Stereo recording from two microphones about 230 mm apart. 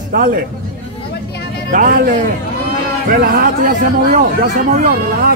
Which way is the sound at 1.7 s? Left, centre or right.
Right.